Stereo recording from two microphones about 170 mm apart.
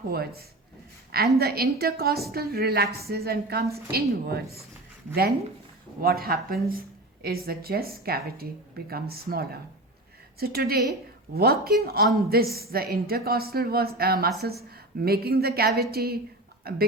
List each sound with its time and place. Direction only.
0.1 s a woman's voice: 65° right (ahead or behind)
6.0 s a woman's voice: 60° right (ahead or behind)